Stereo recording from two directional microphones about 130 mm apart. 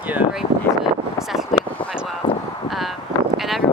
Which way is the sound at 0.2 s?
55° left (ahead or behind).